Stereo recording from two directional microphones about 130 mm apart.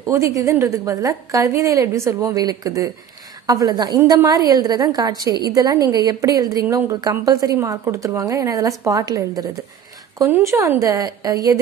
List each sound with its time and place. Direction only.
0.4 s a woman's voice: 20° right (ahead or behind)
10.3 s a woman's voice: 20° right (ahead or behind)